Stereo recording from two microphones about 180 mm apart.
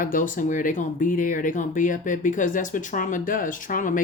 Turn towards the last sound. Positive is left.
turn(degrees=50)  # may be behind; listen again after turning